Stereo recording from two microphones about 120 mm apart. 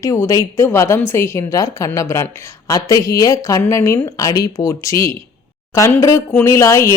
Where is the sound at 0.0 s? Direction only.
25° left (ahead or behind).